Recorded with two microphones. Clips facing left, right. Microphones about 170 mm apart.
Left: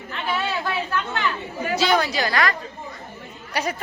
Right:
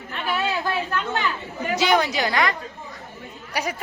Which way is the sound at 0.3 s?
20° right (ahead or behind).